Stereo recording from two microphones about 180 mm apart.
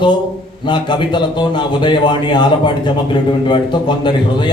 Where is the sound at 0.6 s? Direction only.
25° left (ahead or behind).